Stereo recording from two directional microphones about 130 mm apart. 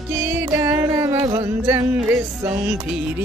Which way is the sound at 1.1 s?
30° right (ahead or behind).